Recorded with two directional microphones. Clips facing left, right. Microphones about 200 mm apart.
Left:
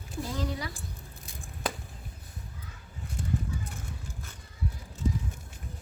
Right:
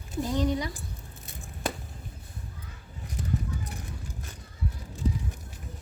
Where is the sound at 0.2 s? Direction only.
20° right (ahead or behind).